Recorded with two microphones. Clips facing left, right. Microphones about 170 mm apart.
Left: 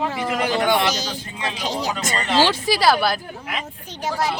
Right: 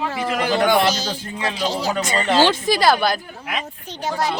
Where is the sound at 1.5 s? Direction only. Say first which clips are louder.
Right 3 dB; 15° left (ahead or behind).